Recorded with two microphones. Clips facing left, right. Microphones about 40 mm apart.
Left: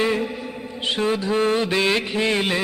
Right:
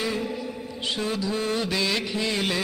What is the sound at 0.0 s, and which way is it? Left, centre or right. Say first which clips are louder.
Mantra: left 7 dB; left.